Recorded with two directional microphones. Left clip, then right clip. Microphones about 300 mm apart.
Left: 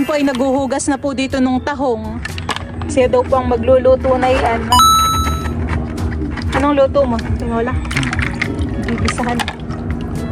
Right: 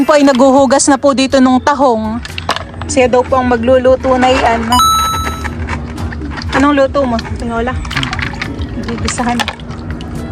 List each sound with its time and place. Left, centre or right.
0.0 s speech: right
4.7 s music: centre
6.5 s speech: right
8.1 s music: centre